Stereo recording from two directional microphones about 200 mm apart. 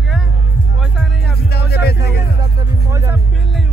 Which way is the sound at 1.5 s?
55° left (ahead or behind).